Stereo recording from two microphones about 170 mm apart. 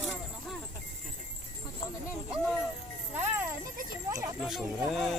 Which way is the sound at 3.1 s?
10° right (ahead or behind).